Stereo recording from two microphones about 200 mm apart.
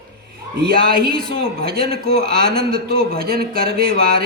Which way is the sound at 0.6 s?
50° right (ahead or behind).